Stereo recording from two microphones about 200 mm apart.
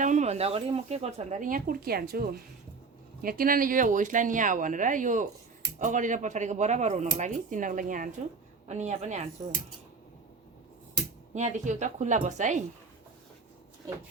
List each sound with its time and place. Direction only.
0.0 s speech: 35° right (ahead or behind)
11.3 s speech: 35° right (ahead or behind)